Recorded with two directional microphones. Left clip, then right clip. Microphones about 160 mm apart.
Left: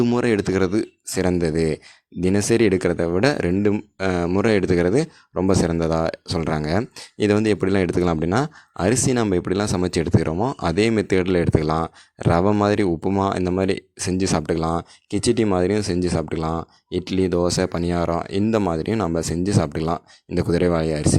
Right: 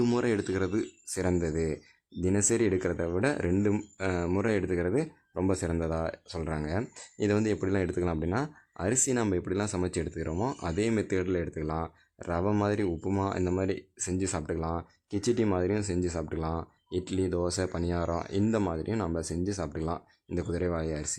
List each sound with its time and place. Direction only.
0.2 s speech: 35° left (ahead or behind)